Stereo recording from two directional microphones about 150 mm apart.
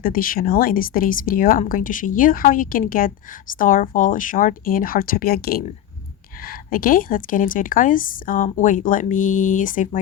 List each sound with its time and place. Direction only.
0.0 s speech: 70° left (ahead or behind); by 5.6 s 85° left
6.7 s a woman's voice: 70° left (ahead or behind)